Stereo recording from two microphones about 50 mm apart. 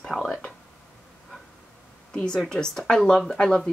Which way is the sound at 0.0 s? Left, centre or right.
Centre.